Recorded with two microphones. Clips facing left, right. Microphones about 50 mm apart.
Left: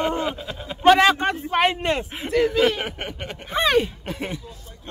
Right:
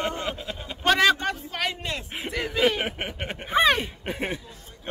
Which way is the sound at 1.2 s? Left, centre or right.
Left.